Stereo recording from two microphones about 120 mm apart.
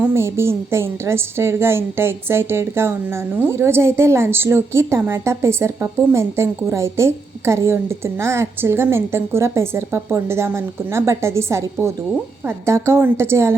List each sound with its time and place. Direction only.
0.0 s a woman's voice: 20° right (ahead or behind)